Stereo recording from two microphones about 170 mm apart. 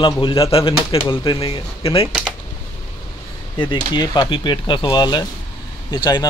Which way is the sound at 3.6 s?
25° left (ahead or behind).